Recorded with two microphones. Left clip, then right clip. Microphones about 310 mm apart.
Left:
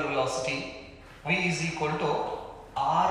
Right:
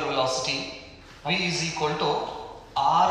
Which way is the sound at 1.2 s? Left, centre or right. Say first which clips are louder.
Right 2 dB; centre.